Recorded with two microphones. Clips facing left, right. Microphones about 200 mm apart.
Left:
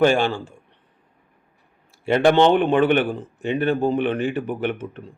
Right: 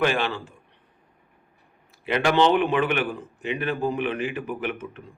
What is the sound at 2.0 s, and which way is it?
Speech, 45° left (ahead or behind).